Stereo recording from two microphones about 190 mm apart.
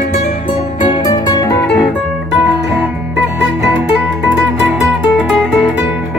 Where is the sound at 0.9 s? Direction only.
20° left (ahead or behind).